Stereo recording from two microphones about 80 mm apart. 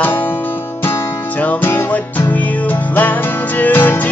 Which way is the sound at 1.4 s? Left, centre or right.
Left.